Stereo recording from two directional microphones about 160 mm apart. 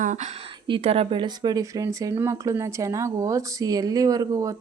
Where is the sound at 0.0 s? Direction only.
50° right (ahead or behind).